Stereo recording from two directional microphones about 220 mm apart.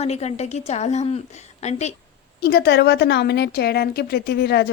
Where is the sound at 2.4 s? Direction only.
45° left (ahead or behind).